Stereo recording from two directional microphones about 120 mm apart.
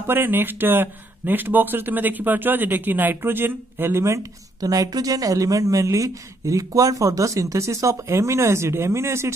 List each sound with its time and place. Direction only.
0.0 s speech: 20° right (ahead or behind)